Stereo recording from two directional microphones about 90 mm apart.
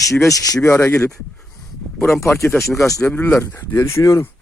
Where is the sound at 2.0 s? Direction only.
30° left (ahead or behind).